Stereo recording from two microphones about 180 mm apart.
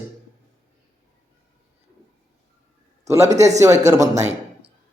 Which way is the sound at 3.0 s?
15° right (ahead or behind).